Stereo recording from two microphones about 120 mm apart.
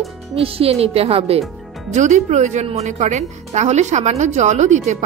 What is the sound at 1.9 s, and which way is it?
Speech, 80° right.